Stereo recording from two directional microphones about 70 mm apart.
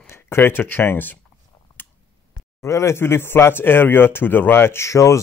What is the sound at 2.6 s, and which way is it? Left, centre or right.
Speech, left.